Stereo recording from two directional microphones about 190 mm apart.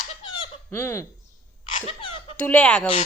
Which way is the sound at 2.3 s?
5° left (ahead or behind).